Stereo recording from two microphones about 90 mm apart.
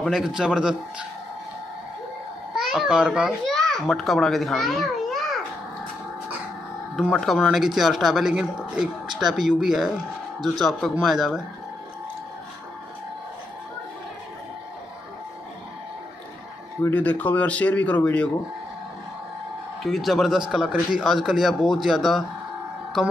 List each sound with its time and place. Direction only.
0.2 s speech: 10° right (ahead or behind)
2.5 s a child's voice: 5° right (ahead or behind)
3.4 s a child's voice: 5° left (ahead or behind)
7.0 s a man's voice: centre (ahead or behind)
16.8 s speech: 20° left (ahead or behind)
19.8 s a man's voice: centre (ahead or behind)